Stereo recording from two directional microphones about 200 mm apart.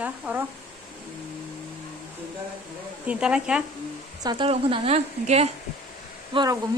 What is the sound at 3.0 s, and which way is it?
Speech, 5° right (ahead or behind).